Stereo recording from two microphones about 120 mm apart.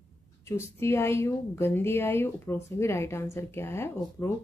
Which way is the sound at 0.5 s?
25° left (ahead or behind).